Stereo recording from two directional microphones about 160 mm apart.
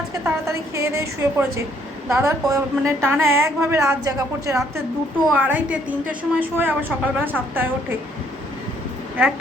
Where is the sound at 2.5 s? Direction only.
15° right (ahead or behind).